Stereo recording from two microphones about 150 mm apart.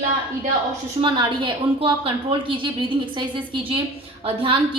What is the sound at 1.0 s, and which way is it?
A woman's voice, 30° right (ahead or behind).